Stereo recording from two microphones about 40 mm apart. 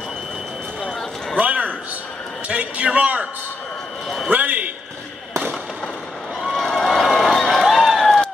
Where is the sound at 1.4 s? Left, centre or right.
Right.